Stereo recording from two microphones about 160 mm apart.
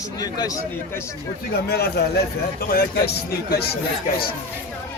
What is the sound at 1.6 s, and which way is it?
Speech, 85° left.